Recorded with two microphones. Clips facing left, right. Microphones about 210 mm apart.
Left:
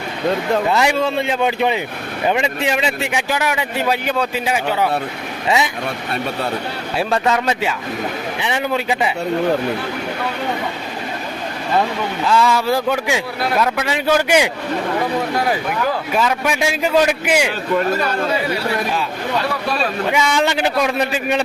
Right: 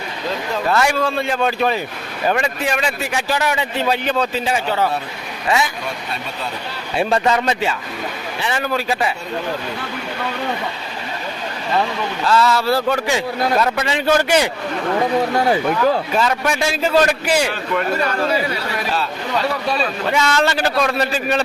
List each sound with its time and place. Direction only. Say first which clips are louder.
0.7 s speech: left 1 dB; 20° left (ahead or behind)
5.5 s speech: left 1 dB; 20° left (ahead or behind)
6.9 s speech: right 1 dB; centre (ahead or behind)
8.4 s speech: even; 15° left (ahead or behind)
12.2 s speech: even; 15° left (ahead or behind)
16.1 s speech: even; 10° left (ahead or behind)
20.1 s speech: even; 10° left (ahead or behind)